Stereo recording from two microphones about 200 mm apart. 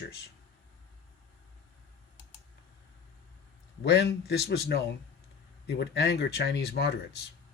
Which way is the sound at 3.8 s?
55° left (ahead or behind).